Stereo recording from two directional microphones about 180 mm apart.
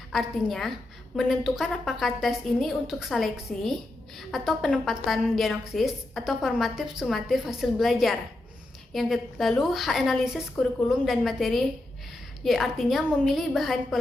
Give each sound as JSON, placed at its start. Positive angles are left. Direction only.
{"t": 0.1, "sound": "a woman's voice", "side_deg": 0}
{"t": 10.5, "sound": "a woman's voice", "side_deg": 10}